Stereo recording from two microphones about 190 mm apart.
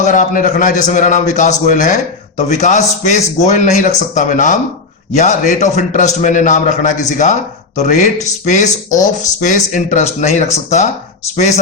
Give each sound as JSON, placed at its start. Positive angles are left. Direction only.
{"t": 0.0, "sound": "speech", "side_deg": 40}